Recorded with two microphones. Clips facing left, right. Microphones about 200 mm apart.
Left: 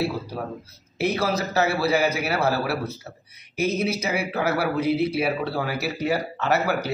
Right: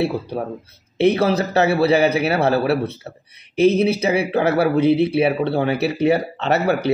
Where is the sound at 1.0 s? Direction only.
30° right (ahead or behind).